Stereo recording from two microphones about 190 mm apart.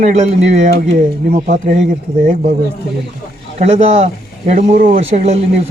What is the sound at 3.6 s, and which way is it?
Speech, 35° right (ahead or behind).